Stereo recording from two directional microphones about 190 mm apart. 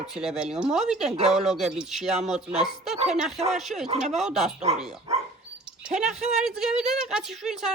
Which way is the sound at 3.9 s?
40° right (ahead or behind).